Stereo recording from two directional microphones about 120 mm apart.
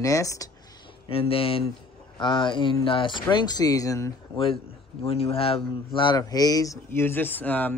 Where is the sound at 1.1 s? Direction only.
50° left (ahead or behind).